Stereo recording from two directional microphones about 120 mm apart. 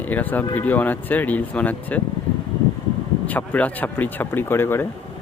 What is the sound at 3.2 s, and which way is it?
Speech, 10° left (ahead or behind).